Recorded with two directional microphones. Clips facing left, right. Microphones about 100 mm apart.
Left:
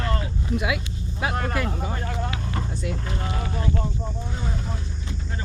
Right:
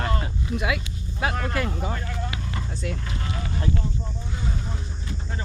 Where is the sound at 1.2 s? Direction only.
5° left (ahead or behind).